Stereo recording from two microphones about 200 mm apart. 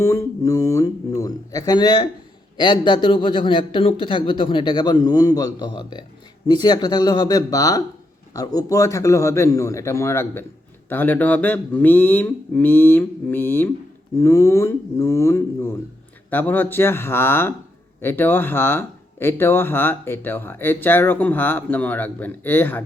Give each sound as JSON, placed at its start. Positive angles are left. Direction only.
{"t": 0.0, "sound": "a man's voice", "side_deg": 15}